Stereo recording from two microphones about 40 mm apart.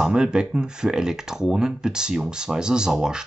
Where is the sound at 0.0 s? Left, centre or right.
Right.